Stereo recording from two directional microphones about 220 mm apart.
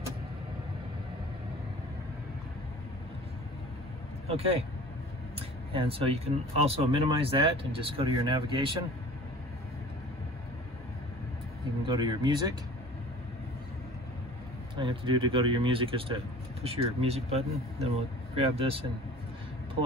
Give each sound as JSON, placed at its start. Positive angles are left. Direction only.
{"t": 4.3, "sound": "speech", "side_deg": -25}
{"t": 5.7, "sound": "speech", "side_deg": -25}
{"t": 11.8, "sound": "speech", "side_deg": -20}
{"t": 14.8, "sound": "speech", "side_deg": -25}